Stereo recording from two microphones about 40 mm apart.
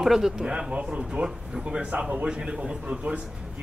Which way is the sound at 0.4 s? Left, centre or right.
Right.